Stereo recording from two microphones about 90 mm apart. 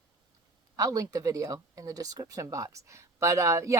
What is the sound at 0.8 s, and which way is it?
Speech, 40° right (ahead or behind).